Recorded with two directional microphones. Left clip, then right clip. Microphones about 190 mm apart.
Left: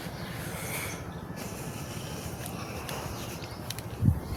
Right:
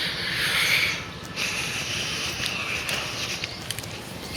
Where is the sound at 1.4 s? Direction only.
25° left (ahead or behind).